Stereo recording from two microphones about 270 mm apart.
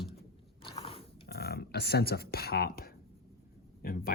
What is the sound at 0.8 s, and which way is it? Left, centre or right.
Dog, left.